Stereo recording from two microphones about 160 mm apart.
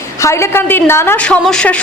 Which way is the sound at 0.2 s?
15° left (ahead or behind).